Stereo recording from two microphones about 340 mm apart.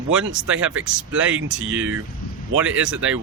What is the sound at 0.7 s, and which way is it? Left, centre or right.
Speech, centre.